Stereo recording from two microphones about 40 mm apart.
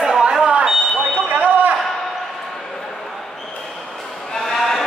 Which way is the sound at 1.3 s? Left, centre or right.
Right.